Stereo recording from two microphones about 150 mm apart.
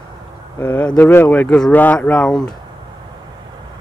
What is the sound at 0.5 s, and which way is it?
Speech, 10° left (ahead or behind).